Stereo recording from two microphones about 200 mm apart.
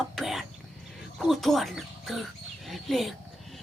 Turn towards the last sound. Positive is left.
turn(degrees=0)  # may be behind; listen again after turning